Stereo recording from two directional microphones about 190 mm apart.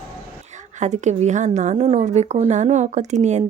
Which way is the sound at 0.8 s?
40° right (ahead or behind).